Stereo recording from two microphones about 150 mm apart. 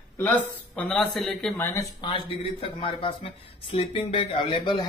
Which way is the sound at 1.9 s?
35° left (ahead or behind).